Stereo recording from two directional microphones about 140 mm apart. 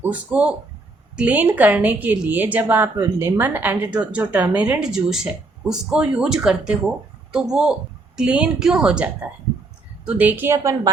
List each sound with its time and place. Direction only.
0.0 s a woman's voice: 10° right (ahead or behind)
10.1 s a woman's voice: 10° right (ahead or behind)